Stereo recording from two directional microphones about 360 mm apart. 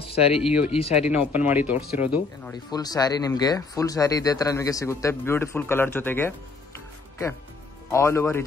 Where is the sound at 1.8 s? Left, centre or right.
Left.